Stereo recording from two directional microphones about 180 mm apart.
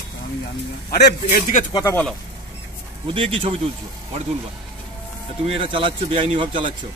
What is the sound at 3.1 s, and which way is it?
Speech, 30° right (ahead or behind).